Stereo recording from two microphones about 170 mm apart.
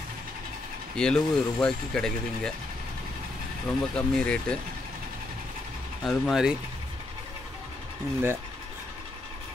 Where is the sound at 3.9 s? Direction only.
5° left (ahead or behind).